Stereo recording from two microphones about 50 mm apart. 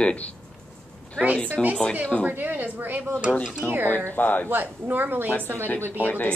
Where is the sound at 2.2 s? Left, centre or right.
Right.